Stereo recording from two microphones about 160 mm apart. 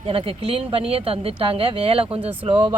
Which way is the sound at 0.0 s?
35° right (ahead or behind).